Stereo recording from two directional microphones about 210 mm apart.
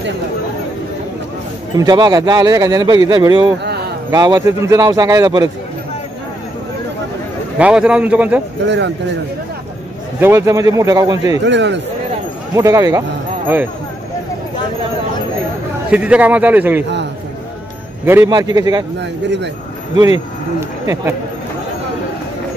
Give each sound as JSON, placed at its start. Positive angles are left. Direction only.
{"t": 1.8, "sound": "a man's voice", "side_deg": -20}
{"t": 7.5, "sound": "a man's voice", "side_deg": -5}
{"t": 8.6, "sound": "a man's voice", "side_deg": -55}
{"t": 10.2, "sound": "a man's voice", "side_deg": -15}
{"t": 11.4, "sound": "a man's voice", "side_deg": -55}
{"t": 12.5, "sound": "a man's voice", "side_deg": -15}
{"t": 15.9, "sound": "a man's voice", "side_deg": -5}
{"t": 18.0, "sound": "a man's voice", "side_deg": -10}
{"t": 20.8, "sound": "speech", "side_deg": -15}